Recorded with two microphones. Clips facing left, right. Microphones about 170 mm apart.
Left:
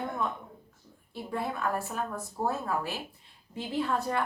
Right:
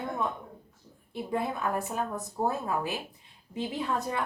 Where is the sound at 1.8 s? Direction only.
20° right (ahead or behind).